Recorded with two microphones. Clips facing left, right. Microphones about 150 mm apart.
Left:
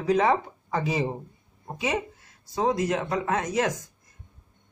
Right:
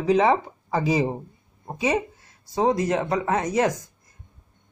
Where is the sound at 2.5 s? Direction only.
30° right (ahead or behind).